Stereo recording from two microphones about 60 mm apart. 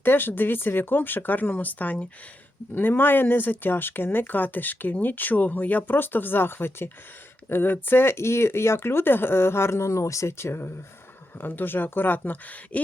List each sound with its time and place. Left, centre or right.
0.0 s speech: left